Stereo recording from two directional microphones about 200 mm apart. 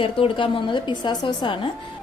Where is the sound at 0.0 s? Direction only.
25° left (ahead or behind).